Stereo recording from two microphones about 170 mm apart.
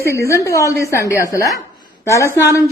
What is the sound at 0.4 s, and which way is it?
A man's voice, 15° left (ahead or behind).